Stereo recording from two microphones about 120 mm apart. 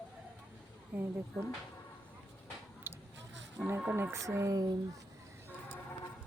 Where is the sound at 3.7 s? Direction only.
15° right (ahead or behind).